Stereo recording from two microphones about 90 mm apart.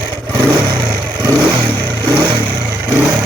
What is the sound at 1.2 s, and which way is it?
Vehicle, 40° right (ahead or behind).